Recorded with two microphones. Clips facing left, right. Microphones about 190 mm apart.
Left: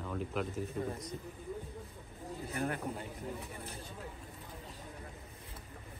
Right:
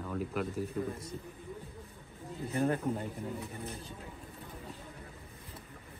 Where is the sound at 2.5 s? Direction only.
35° right (ahead or behind).